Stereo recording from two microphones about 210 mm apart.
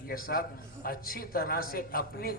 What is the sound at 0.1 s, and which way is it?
A man's voice, 45° left (ahead or behind).